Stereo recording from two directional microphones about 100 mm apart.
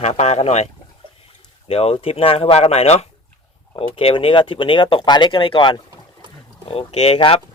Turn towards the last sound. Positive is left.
turn(degrees=75)  # may be behind; listen again after turning